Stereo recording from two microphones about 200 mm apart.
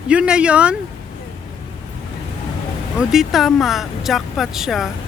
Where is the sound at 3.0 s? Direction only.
Centre (ahead or behind).